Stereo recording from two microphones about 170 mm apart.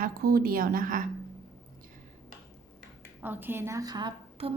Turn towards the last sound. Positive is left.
turn(degrees=-30)  # may be behind; listen again after turning